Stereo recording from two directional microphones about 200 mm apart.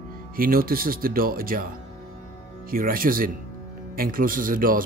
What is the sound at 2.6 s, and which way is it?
Speech, 45° right (ahead or behind).